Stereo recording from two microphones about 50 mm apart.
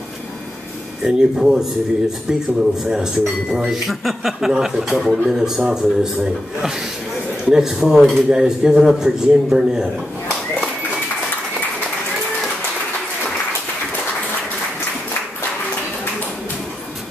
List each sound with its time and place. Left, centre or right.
1.0 s speech: centre
2.8 s speech: centre